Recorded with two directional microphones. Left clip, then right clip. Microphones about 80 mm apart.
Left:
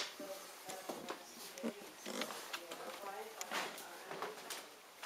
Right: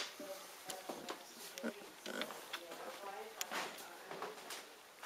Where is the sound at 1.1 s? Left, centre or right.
Centre.